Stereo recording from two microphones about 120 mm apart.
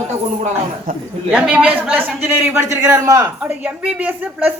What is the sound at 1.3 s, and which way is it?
A man's voice, 10° right (ahead or behind).